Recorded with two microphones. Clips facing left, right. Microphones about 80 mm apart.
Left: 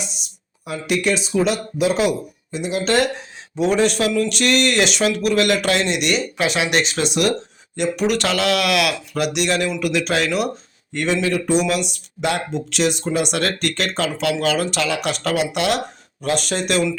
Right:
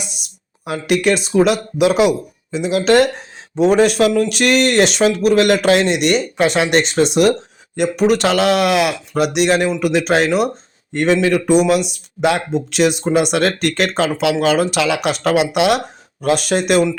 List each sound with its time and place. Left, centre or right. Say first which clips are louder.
0.6 s speech: right 5 dB; right
1.8 s speech: right 5 dB; right
3.6 s speech: right 5 dB; right
10.9 s speech: right 6 dB; right
15.1 s speech: right 5 dB; right
15.4 s speech: right 6 dB; right